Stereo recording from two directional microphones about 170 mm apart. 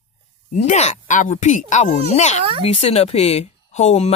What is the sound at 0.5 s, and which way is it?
Speech, 45° left (ahead or behind).